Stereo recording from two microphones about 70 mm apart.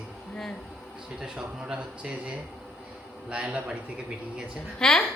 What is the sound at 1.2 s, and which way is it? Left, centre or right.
Speech, centre.